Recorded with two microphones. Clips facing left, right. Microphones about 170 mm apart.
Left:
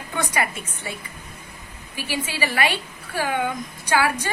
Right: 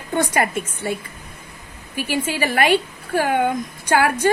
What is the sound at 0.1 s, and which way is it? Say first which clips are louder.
Speech: right 6 dB; 50° right (ahead or behind).